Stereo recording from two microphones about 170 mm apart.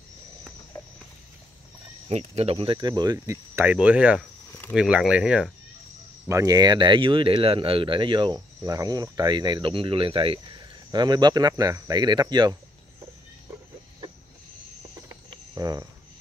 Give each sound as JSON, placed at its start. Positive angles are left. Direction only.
{"t": 2.0, "sound": "speech", "side_deg": -35}
{"t": 6.2, "sound": "speech", "side_deg": -20}
{"t": 15.0, "sound": "cricket", "side_deg": -20}